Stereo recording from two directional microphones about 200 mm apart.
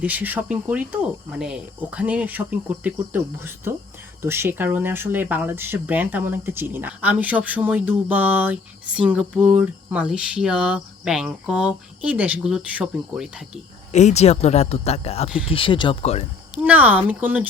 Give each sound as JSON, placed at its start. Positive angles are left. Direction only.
{"t": 0.0, "sound": "speech", "side_deg": -10}
{"t": 13.9, "sound": "speech", "side_deg": 35}
{"t": 16.6, "sound": "speech", "side_deg": -10}